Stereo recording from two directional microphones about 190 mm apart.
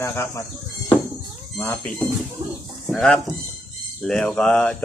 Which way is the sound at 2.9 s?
5° left (ahead or behind).